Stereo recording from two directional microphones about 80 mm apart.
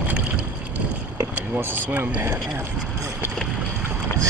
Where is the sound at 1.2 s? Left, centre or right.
Right.